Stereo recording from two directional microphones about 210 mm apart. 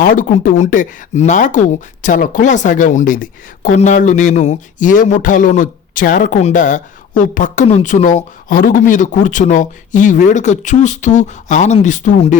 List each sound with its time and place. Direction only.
0.0 s speech: 40° left (ahead or behind)